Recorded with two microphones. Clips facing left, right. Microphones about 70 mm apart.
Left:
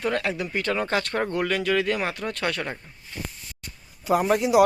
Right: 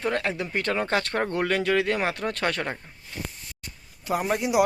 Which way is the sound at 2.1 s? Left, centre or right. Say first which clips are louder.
Right 1 dB; right.